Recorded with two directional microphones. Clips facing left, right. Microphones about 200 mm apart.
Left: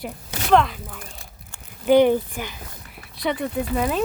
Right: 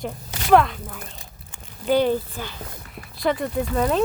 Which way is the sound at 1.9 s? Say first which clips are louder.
Left 4 dB; 15° left (ahead or behind).